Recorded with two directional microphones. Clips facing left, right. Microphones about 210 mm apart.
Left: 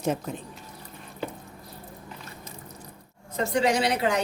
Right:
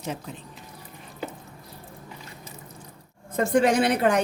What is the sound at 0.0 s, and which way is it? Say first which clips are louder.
Speech: left 6 dB; 45° left (ahead or behind).